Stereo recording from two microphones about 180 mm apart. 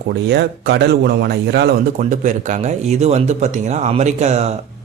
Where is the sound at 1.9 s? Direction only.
45° right (ahead or behind).